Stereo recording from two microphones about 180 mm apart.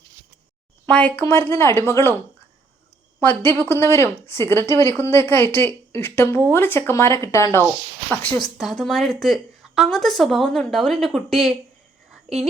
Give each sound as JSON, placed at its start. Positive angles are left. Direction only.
{"t": 0.9, "sound": "speech", "side_deg": 10}
{"t": 3.2, "sound": "a woman's voice", "side_deg": 10}